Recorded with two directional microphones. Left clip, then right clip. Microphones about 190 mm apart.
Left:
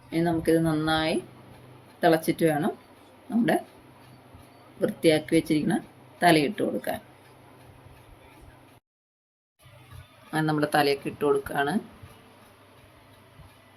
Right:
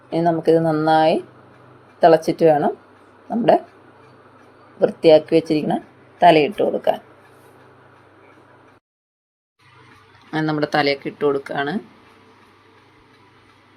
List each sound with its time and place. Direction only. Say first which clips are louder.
0.1 s speech: right 8 dB; 5° right (ahead or behind)
4.8 s speech: right 10 dB; 5° right (ahead or behind)
10.3 s speech: right 4 dB; 10° right (ahead or behind)